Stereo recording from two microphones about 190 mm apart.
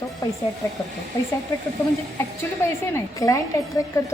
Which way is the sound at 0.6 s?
10° left (ahead or behind).